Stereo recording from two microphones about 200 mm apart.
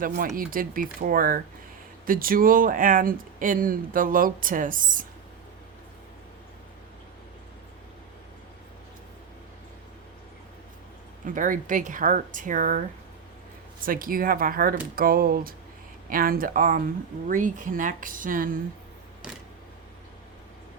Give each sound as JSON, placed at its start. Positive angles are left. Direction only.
{"t": 0.3, "sound": "speech", "side_deg": -45}
{"t": 11.3, "sound": "speech", "side_deg": -40}
{"t": 13.8, "sound": "speech", "side_deg": -45}